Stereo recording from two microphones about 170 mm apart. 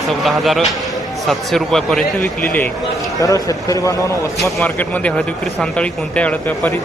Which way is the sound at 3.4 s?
20° left (ahead or behind).